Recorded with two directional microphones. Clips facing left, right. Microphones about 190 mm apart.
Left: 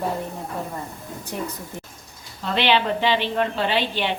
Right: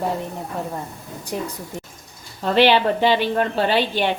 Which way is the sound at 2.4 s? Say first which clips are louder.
Right 5 dB; 45° right (ahead or behind).